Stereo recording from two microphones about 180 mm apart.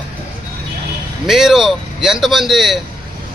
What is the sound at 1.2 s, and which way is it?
A man's voice, centre (ahead or behind).